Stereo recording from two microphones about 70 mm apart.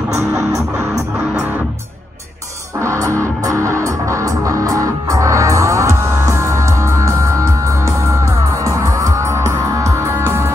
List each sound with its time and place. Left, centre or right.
2.8 s music: right